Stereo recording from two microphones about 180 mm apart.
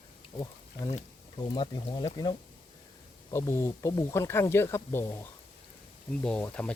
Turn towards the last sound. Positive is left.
turn(degrees=5)  # may be behind; listen again after turning